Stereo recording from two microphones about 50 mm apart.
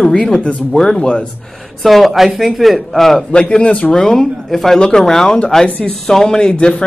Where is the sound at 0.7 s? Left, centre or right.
Centre.